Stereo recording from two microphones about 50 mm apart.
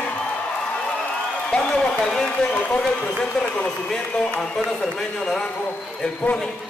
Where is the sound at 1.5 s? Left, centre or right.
Centre.